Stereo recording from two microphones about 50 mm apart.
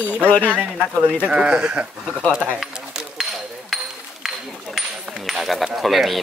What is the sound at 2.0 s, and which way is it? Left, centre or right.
Speech, right.